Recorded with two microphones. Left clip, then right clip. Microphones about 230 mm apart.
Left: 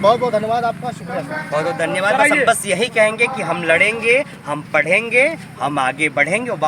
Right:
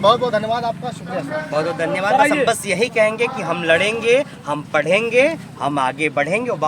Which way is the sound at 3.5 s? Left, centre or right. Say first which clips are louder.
Even; centre.